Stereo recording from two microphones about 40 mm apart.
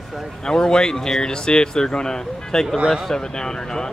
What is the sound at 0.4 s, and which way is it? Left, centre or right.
Speech, centre.